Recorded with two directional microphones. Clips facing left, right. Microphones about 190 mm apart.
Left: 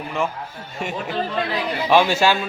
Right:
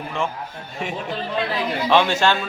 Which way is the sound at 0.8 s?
Centre (ahead or behind).